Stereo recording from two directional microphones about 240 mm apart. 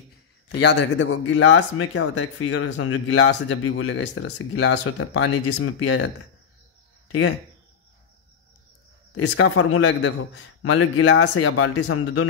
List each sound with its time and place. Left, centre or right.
0.6 s speech: left
9.1 s speech: left